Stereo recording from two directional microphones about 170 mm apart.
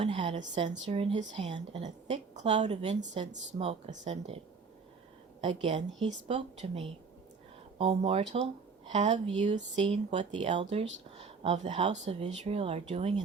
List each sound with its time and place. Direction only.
0.0 s a woman's voice: 30° right (ahead or behind)
5.4 s a woman's voice: 35° right (ahead or behind)
11.2 s a sound: 40° right (ahead or behind)
11.7 s a woman's voice: 35° right (ahead or behind)